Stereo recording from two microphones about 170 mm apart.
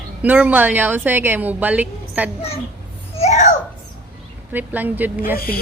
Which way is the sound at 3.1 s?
40° left (ahead or behind).